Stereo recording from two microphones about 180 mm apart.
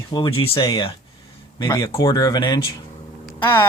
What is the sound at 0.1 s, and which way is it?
Speech, 30° left (ahead or behind).